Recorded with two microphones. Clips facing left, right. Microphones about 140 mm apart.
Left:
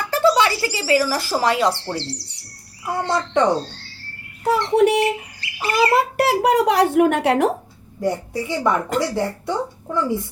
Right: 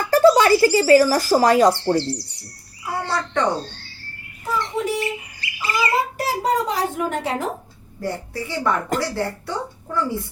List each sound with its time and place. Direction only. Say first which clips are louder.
0.1 s speech: right 4 dB; 45° right (ahead or behind)
3.0 s speech: left 4 dB; 20° left (ahead or behind)
3.6 s a sound: left 1 dB; centre (ahead or behind)
4.4 s speech: left 8 dB; 70° left (ahead or behind)
8.0 s speech: left 5 dB; 15° left (ahead or behind)